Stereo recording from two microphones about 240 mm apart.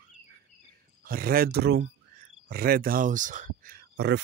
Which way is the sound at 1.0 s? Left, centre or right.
Right.